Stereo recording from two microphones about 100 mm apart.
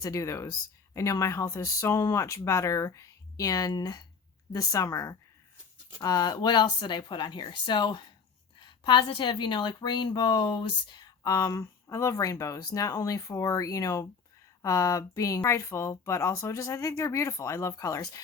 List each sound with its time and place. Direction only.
0.0 s speech: 30° left (ahead or behind); by 8.0 s 50° left (ahead or behind)
8.6 s a sound: 50° left (ahead or behind)
9.0 s speech: 55° left (ahead or behind); by 18.2 s 35° left (ahead or behind)